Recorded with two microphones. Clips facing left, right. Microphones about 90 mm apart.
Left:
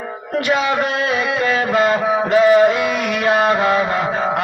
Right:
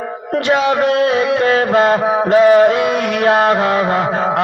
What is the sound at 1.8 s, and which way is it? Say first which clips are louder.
Mantra: right 3 dB; 35° right (ahead or behind).